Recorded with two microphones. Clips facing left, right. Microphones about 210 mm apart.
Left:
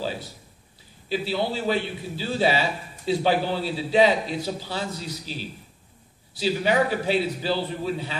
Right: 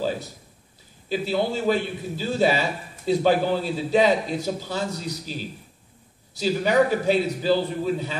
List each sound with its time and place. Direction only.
1.0 s a man's voice: 45° right (ahead or behind)